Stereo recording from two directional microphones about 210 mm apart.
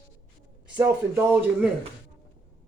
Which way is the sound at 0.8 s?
10° right (ahead or behind).